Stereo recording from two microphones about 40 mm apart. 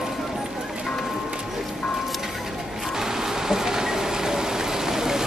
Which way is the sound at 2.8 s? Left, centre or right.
Centre.